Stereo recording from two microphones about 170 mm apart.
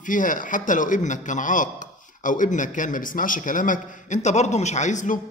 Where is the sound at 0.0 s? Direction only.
50° left (ahead or behind).